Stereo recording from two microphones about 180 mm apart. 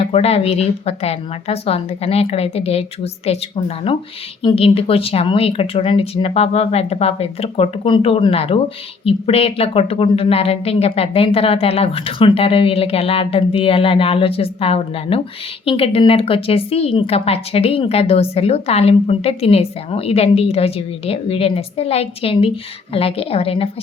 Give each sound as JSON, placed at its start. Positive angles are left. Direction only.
{"t": 0.0, "sound": "speech", "side_deg": 35}